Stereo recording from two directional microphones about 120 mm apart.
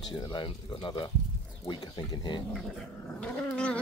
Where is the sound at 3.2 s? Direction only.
10° left (ahead or behind).